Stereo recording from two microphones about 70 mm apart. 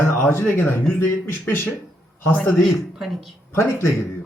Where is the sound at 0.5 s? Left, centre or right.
Left.